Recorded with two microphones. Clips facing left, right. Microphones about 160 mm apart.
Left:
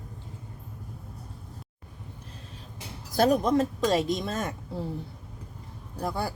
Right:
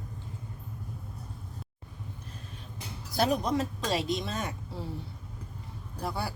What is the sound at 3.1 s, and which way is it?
Speech, 45° left (ahead or behind).